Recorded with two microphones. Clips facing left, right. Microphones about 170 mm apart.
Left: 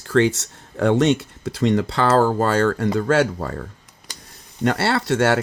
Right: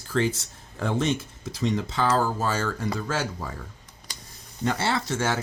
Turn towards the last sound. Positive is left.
turn(degrees=70)  # may be behind; listen again after turning